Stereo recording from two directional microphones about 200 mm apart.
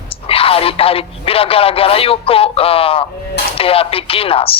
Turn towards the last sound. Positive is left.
turn(degrees=30)  # may be behind; listen again after turning